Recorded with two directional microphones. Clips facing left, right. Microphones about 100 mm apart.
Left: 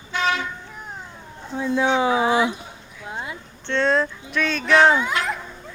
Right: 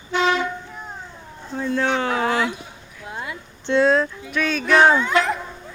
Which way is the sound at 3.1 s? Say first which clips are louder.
Even; 25° left (ahead or behind).